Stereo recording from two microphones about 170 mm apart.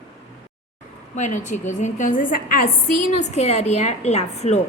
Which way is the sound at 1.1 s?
45° left (ahead or behind).